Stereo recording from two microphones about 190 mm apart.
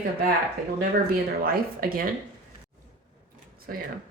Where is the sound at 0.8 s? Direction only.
50° right (ahead or behind).